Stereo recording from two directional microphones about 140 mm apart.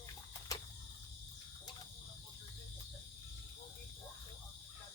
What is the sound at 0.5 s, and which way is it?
Cricket, 25° left (ahead or behind).